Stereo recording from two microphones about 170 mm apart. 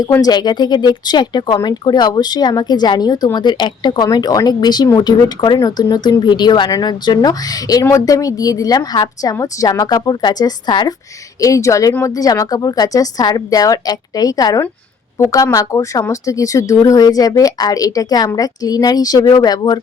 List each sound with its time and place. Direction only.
0.0 s speech: 20° left (ahead or behind)